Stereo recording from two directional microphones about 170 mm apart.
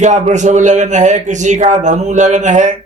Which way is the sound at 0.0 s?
45° right (ahead or behind).